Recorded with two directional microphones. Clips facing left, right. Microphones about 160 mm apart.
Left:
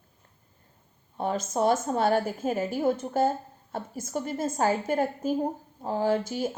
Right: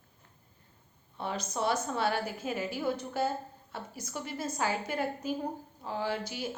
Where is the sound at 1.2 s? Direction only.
45° left (ahead or behind).